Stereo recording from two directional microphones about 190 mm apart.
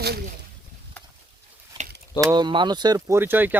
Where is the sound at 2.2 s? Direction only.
20° right (ahead or behind).